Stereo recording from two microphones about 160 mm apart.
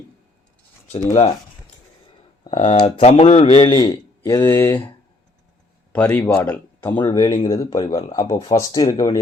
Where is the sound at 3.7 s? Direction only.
25° left (ahead or behind).